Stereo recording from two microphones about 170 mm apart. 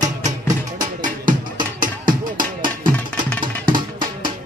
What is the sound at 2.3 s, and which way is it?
Music, 55° right (ahead or behind).